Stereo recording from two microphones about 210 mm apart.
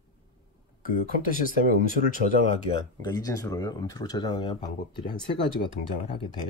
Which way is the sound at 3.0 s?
15° left (ahead or behind).